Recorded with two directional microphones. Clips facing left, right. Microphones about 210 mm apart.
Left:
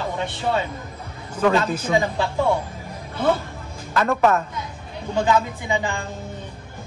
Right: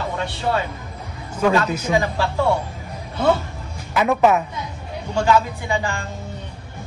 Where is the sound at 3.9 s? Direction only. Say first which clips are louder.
Right 2 dB; 15° right (ahead or behind).